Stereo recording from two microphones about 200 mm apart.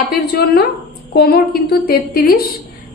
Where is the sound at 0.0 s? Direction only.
55° left (ahead or behind).